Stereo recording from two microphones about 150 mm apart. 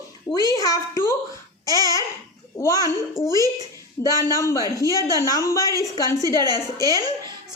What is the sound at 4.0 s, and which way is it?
A woman's voice, 20° left (ahead or behind).